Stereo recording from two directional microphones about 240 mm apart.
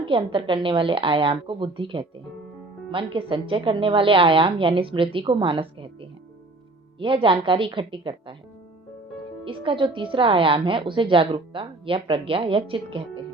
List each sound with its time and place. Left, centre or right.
0.0 s a woman's voice: right
9.4 s a woman's voice: right